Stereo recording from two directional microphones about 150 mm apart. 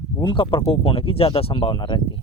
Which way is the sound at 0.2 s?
35° left (ahead or behind).